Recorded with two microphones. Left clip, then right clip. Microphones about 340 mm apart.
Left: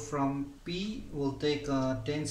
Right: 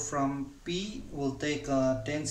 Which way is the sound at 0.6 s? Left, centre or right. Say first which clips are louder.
Right 2 dB; right.